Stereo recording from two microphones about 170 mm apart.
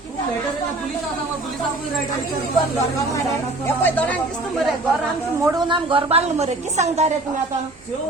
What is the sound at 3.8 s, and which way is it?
Speech, 10° left (ahead or behind).